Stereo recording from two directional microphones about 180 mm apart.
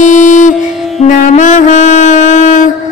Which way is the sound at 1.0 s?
45° left (ahead or behind).